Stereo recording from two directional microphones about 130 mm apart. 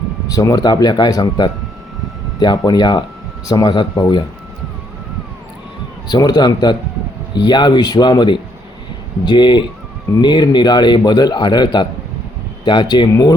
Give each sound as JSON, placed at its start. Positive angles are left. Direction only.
{"t": 0.3, "sound": "a man's voice", "side_deg": 30}
{"t": 6.1, "sound": "a man's voice", "side_deg": 30}